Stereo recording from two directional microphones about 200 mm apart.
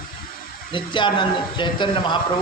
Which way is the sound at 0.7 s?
25° left (ahead or behind).